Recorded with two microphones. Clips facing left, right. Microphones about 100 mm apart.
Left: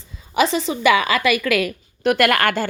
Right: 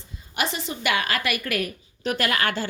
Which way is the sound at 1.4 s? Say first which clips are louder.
Left 8 dB; 90° left.